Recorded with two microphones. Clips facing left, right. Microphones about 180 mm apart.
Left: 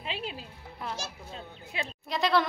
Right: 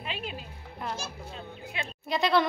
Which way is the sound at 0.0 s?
30° left (ahead or behind).